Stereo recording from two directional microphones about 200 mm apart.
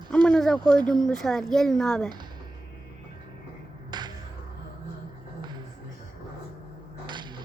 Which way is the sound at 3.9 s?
20° right (ahead or behind).